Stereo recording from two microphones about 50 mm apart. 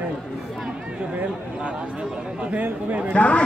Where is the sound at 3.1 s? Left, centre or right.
Left.